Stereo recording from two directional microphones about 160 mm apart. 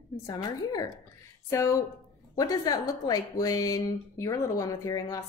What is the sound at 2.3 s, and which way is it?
Speech, 25° left (ahead or behind).